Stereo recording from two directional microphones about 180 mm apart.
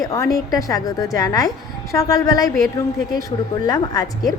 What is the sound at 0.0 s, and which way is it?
A woman's voice, 20° left (ahead or behind).